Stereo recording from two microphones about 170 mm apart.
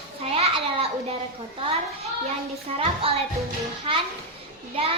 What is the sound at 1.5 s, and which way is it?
A child's voice, 30° right (ahead or behind).